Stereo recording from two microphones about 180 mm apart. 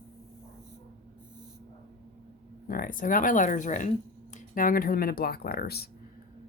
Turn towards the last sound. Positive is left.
turn(degrees=60)  # may be behind; listen again after turning